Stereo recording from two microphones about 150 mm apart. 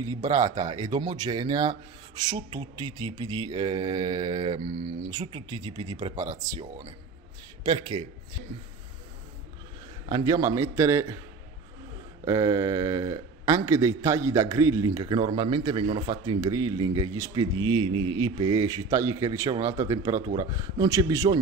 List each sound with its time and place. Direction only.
0.2 s a man's voice: 25° right (ahead or behind)
7.6 s a man's voice: 30° right (ahead or behind)
10.0 s a man's voice: 25° right (ahead or behind)
12.3 s a man's voice: 20° right (ahead or behind)